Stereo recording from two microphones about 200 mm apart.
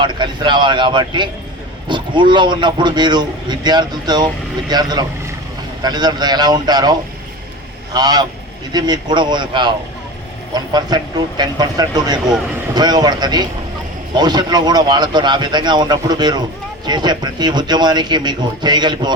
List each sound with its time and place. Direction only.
0.0 s speech: 25° right (ahead or behind)
7.9 s speech: 20° right (ahead or behind)